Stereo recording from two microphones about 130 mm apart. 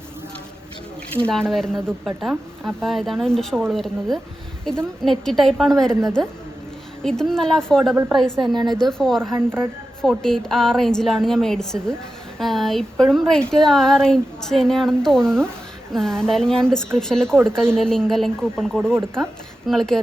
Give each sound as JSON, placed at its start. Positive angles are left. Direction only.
{"t": 1.1, "sound": "speech", "side_deg": 5}
{"t": 9.3, "sound": "speech", "side_deg": -15}
{"t": 10.0, "sound": "speech", "side_deg": 5}